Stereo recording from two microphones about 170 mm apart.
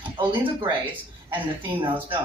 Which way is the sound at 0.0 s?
30° right (ahead or behind).